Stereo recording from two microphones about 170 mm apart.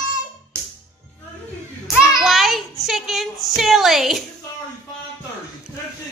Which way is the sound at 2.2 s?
Centre (ahead or behind).